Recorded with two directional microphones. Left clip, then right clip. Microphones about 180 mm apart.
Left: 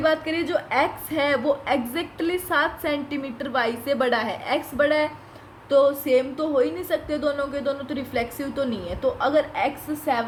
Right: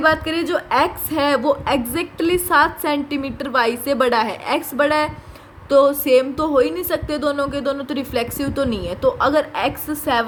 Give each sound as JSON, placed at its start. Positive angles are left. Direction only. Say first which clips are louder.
{"t": 0.0, "sound": "a woman's voice", "louder": "right 5 dB", "side_deg": -55}